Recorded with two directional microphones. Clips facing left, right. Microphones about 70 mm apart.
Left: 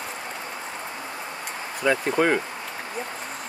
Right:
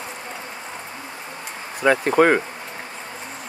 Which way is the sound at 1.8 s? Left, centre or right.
Right.